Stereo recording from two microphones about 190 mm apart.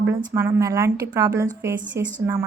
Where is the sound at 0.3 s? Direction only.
15° right (ahead or behind).